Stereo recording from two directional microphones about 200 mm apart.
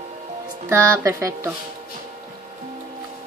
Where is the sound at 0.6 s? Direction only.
15° right (ahead or behind).